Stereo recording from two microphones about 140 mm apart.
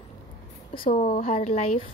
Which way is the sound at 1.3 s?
50° left (ahead or behind).